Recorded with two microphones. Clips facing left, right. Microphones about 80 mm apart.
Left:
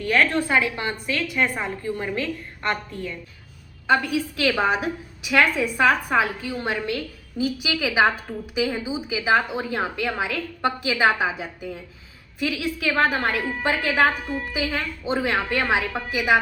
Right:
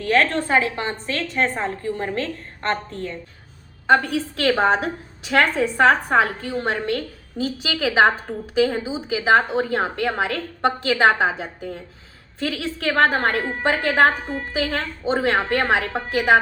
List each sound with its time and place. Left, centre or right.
0.3 s a woman's voice: right